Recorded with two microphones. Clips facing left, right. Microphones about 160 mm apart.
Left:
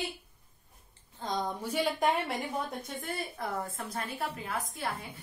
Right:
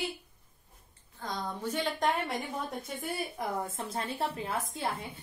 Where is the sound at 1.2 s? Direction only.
20° left (ahead or behind).